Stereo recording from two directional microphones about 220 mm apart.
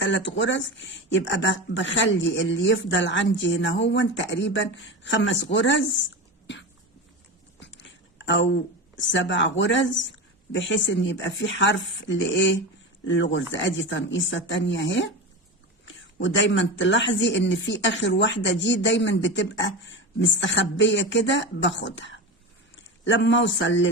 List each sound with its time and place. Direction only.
0.0 s speech: 55° left (ahead or behind)
7.6 s a sound: 55° left (ahead or behind)
9.0 s speech: 55° left (ahead or behind)